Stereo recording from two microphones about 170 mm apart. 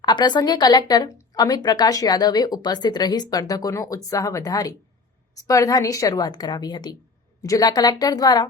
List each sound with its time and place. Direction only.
0.0 s speech: 25° left (ahead or behind)